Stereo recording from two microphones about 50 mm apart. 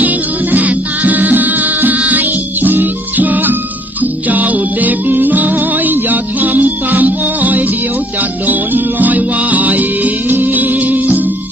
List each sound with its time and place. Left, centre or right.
0.0 s music: right